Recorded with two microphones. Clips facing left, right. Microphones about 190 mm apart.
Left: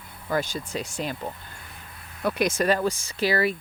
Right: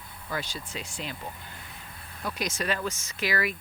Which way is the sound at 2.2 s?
55° left (ahead or behind).